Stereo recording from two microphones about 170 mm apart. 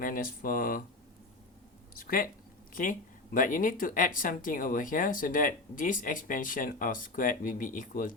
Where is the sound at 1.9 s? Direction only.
55° left (ahead or behind).